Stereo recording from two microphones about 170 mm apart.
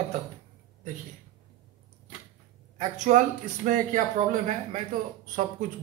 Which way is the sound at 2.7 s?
45° right (ahead or behind).